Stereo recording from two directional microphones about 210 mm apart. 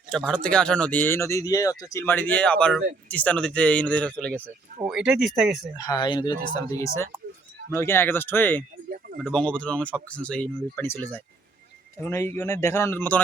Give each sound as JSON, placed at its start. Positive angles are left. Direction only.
{"t": 0.1, "sound": "speech", "side_deg": 0}
{"t": 5.7, "sound": "speech", "side_deg": 20}